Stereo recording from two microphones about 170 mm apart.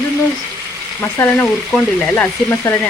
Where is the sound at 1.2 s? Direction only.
10° left (ahead or behind).